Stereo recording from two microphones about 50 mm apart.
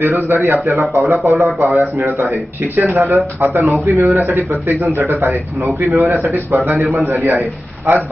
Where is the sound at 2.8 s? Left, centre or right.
Right.